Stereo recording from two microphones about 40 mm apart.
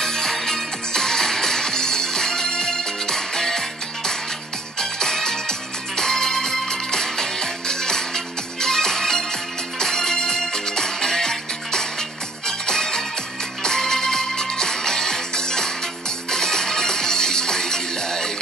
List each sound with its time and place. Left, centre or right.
0.0 s music: centre